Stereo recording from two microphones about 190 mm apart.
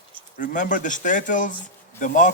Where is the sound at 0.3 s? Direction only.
40° left (ahead or behind).